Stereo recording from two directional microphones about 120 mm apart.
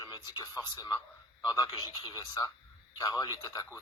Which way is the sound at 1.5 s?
30° left (ahead or behind).